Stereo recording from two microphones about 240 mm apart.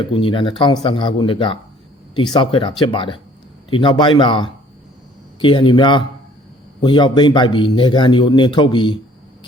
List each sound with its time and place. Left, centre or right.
0.0 s a man's voice: left